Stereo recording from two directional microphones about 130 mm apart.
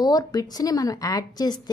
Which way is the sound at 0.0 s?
30° left (ahead or behind).